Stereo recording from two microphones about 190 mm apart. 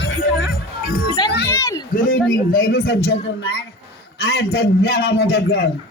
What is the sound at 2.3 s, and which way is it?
Speech, 50° left (ahead or behind).